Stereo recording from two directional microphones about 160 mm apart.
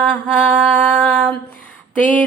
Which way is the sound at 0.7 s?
10° left (ahead or behind).